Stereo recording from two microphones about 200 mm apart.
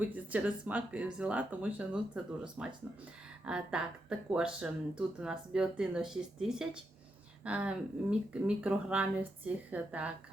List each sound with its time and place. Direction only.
0.0 s speech: 10° right (ahead or behind)